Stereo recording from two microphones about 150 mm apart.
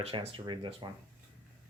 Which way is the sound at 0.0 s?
40° right (ahead or behind).